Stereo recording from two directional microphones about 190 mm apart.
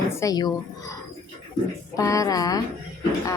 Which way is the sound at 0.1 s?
15° left (ahead or behind).